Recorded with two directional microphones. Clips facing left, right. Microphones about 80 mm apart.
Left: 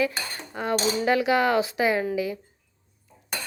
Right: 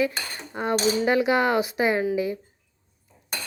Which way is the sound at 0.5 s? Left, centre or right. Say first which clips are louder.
Right 2 dB; right.